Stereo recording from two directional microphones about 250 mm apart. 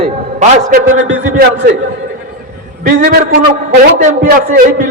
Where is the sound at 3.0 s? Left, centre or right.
Right.